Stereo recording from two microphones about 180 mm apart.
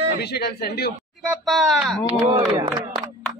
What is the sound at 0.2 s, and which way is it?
Speech, 65° left (ahead or behind).